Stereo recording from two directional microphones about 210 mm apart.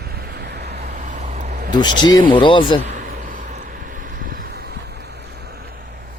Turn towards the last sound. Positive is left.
turn(degrees=-50)  # may be behind; listen again after turning